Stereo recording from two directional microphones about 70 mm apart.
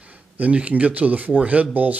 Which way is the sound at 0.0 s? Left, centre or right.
Centre.